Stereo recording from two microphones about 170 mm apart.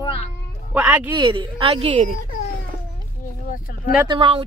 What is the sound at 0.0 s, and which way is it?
Cat, 35° left (ahead or behind).